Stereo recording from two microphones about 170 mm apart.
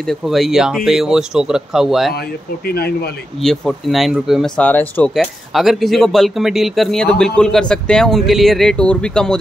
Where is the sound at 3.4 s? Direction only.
Centre (ahead or behind).